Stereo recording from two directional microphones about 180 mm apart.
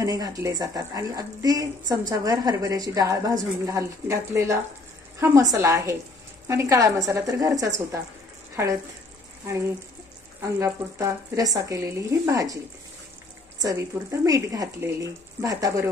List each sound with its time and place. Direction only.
0.0 s a woman's voice: 20° right (ahead or behind)
10.4 s speech: 15° right (ahead or behind)
13.6 s a woman's voice: 20° right (ahead or behind)